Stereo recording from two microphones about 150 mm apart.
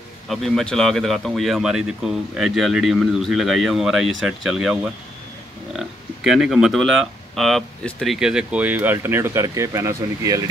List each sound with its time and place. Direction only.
0.3 s speech: centre (ahead or behind); by 10.5 s 20° right (ahead or behind)